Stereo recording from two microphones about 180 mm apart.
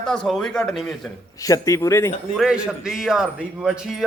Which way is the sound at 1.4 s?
20° left (ahead or behind).